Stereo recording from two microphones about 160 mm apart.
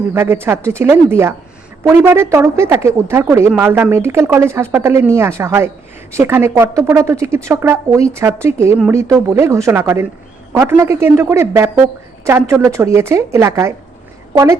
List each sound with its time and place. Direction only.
0.1 s speech: 15° right (ahead or behind)